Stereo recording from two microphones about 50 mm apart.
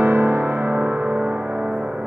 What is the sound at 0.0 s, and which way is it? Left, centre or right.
Music, right.